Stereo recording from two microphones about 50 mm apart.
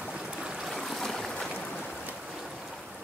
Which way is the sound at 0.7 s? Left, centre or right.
Centre.